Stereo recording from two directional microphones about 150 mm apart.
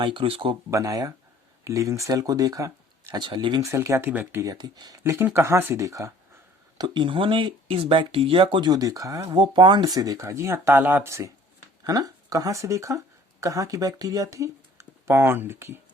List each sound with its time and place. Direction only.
0.0 s speech: 35° right (ahead or behind)
0.7 s speech: 20° right (ahead or behind)
3.7 s speech: 20° right (ahead or behind)
4.6 s speech: 30° right (ahead or behind)